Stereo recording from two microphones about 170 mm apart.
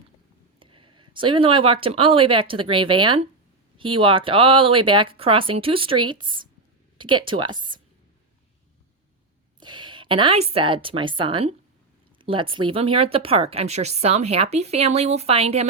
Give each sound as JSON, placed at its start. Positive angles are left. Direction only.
{"t": 0.6, "sound": "speech", "side_deg": -30}
{"t": 9.6, "sound": "a woman's voice", "side_deg": -25}